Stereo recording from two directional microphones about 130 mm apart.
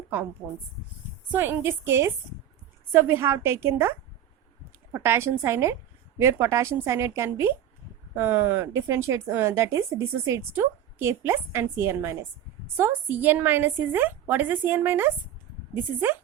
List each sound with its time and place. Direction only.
1.3 s a woman's voice: 15° right (ahead or behind)